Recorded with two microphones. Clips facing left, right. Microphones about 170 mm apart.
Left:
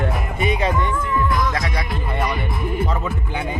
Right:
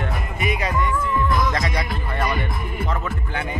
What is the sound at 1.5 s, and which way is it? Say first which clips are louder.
Music: even; 5° left (ahead or behind).